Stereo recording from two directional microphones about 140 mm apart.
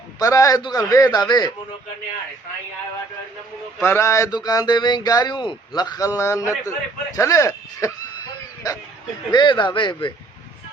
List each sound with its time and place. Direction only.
0.2 s speech: 25° left (ahead or behind)
3.8 s speech: 15° left (ahead or behind)
9.3 s speech: 35° left (ahead or behind)